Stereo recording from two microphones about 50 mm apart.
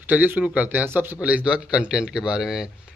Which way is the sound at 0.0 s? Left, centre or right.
Right.